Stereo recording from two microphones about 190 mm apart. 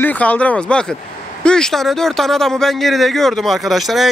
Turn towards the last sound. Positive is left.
turn(degrees=0)  # may be behind; listen again after turning